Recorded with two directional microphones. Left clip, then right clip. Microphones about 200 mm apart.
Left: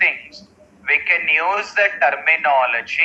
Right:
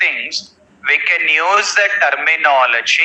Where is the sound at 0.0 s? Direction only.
45° right (ahead or behind).